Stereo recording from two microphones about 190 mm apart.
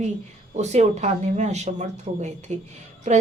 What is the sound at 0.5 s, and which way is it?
A woman's voice, 35° right (ahead or behind).